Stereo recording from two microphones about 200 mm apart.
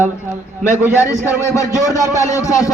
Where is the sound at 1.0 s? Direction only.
15° left (ahead or behind).